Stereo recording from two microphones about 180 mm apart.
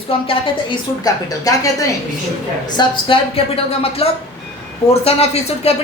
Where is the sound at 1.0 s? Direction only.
20° left (ahead or behind).